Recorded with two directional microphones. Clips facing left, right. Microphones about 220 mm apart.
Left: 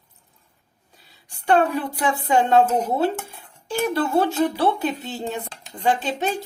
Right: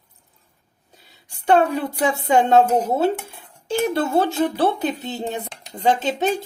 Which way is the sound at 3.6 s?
25° right (ahead or behind).